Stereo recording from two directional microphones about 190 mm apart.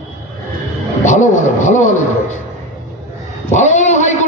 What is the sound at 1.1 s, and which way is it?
Speech, 40° left (ahead or behind).